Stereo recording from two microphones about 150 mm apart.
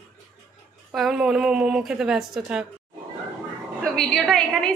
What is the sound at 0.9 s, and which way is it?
A woman's voice, 5° right (ahead or behind).